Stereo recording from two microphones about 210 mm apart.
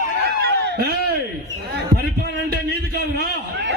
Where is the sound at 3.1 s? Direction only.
50° right (ahead or behind).